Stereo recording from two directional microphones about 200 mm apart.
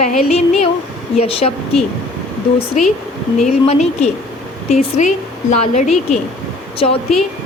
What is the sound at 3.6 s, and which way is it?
Speech, 35° left (ahead or behind).